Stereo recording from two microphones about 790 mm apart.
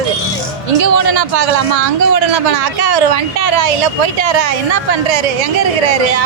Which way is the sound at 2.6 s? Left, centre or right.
Right.